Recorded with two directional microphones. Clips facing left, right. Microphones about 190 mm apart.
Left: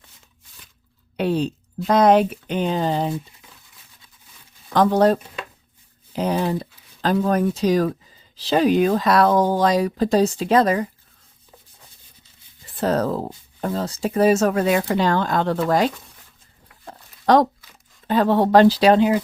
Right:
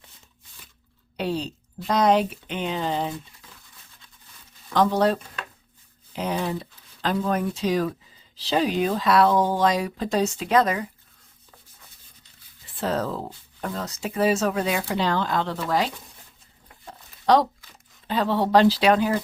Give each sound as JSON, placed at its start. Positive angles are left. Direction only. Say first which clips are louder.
{"t": 1.1, "sound": "speech", "louder": "left 6 dB", "side_deg": 55}
{"t": 4.7, "sound": "speech", "louder": "left 4 dB", "side_deg": 50}
{"t": 6.1, "sound": "speech", "louder": "left 5 dB", "side_deg": 35}
{"t": 12.7, "sound": "speech", "louder": "left 5 dB", "side_deg": 40}
{"t": 13.6, "sound": "speech", "louder": "left 6 dB", "side_deg": 30}
{"t": 14.1, "sound": "speech", "louder": "left 5 dB", "side_deg": 45}
{"t": 17.3, "sound": "speech", "louder": "left 3 dB", "side_deg": 50}
{"t": 18.9, "sound": "speech", "louder": "left 6 dB", "side_deg": 20}